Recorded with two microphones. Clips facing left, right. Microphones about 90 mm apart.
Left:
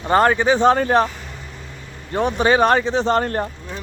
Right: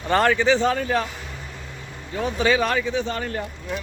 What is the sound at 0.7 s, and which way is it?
Speech, 45° left (ahead or behind).